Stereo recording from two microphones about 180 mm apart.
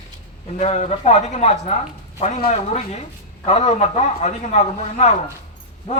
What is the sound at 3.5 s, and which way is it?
A man's voice, 35° left (ahead or behind).